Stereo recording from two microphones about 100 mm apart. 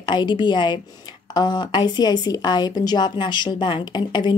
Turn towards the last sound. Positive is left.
turn(degrees=50)  # may be behind; listen again after turning